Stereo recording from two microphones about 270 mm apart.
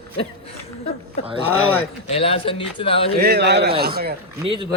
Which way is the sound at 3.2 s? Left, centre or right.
Right.